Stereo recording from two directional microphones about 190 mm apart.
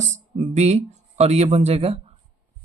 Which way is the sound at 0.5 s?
35° right (ahead or behind).